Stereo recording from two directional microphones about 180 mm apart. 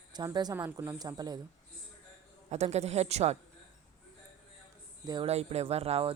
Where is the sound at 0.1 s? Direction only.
25° right (ahead or behind).